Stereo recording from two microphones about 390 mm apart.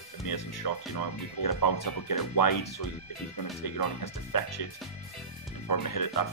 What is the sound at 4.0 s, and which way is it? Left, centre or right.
Speech, left.